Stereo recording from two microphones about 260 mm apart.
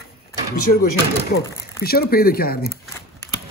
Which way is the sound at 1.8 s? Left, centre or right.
Left.